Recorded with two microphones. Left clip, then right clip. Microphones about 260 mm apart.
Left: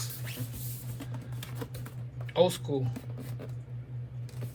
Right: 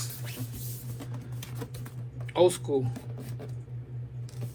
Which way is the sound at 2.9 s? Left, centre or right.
Centre.